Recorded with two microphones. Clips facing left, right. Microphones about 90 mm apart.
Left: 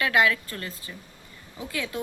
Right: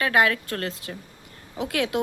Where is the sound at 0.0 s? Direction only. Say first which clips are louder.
Right 1 dB; 45° right (ahead or behind).